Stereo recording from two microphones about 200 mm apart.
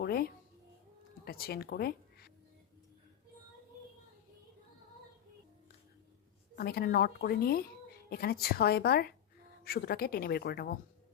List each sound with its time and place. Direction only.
0.0 s a child's voice: 50° left (ahead or behind)
6.6 s speech: 50° left (ahead or behind)